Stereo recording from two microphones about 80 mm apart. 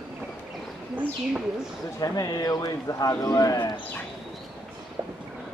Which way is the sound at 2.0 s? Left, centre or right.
Left.